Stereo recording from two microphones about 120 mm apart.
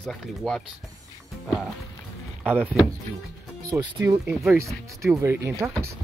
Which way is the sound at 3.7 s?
15° right (ahead or behind).